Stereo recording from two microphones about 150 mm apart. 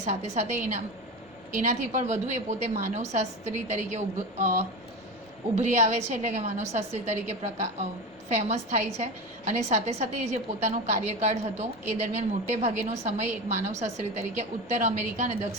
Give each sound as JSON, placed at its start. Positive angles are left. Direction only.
{"t": 0.0, "sound": "a woman's voice", "side_deg": -45}
{"t": 5.7, "sound": "a woman's voice", "side_deg": -50}